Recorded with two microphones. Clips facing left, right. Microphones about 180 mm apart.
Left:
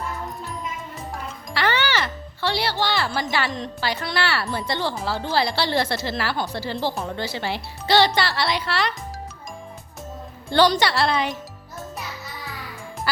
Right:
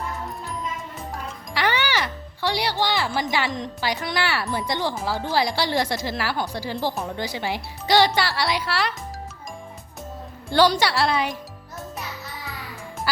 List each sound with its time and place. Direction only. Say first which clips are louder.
1.5 s speech: left 1 dB; 15° right (ahead or behind)
6.9 s speech: even; centre (ahead or behind)
7.2 s speech: even; 15° right (ahead or behind)
10.5 s speech: even; 10° right (ahead or behind)